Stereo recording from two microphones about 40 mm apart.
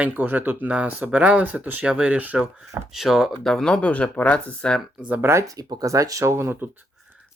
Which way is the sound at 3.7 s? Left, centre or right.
Left.